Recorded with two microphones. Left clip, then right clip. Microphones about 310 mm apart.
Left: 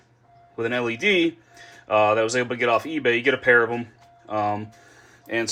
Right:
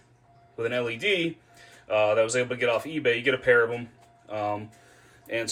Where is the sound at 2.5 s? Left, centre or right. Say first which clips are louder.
Left 4 dB; centre.